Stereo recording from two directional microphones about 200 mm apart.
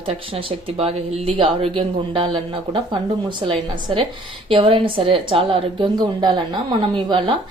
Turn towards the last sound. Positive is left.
turn(degrees=-25)  # may be behind; listen again after turning